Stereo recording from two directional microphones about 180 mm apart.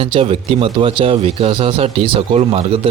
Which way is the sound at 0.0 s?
30° right (ahead or behind).